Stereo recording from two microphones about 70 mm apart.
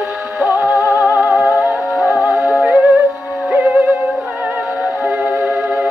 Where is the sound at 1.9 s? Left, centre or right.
Centre.